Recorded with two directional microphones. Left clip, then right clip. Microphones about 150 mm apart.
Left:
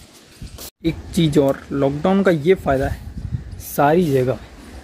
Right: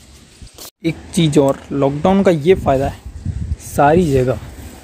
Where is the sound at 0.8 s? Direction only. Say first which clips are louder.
Right 2 dB; 15° right (ahead or behind).